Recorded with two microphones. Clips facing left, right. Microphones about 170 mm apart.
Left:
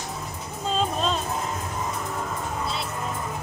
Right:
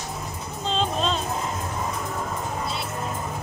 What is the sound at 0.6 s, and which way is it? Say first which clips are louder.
Music: even; 5° left (ahead or behind).